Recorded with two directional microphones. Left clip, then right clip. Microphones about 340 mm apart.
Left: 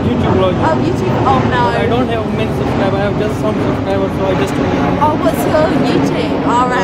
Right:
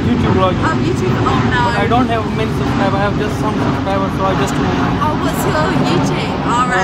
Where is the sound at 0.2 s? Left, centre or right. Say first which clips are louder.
Left 2 dB; centre.